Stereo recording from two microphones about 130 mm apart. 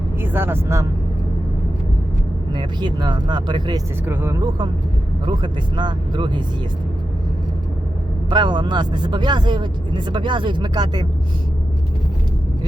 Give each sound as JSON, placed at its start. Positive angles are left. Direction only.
{"t": 0.2, "sound": "speech", "side_deg": -15}
{"t": 2.5, "sound": "speech", "side_deg": -35}
{"t": 4.0, "sound": "speech", "side_deg": -15}
{"t": 4.4, "sound": "speech", "side_deg": -35}
{"t": 8.3, "sound": "speech", "side_deg": -35}